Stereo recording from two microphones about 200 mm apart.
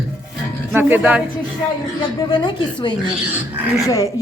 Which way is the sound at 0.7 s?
10° right (ahead or behind).